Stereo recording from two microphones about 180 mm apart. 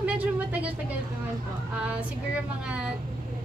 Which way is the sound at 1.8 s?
5° right (ahead or behind).